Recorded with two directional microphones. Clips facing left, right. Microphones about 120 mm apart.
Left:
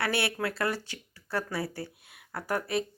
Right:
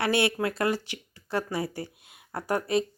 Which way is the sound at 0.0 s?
20° right (ahead or behind).